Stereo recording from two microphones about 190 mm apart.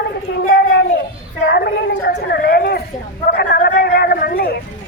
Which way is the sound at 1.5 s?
55° left (ahead or behind).